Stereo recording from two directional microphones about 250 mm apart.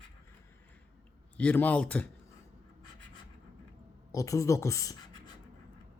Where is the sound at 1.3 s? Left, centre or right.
Centre.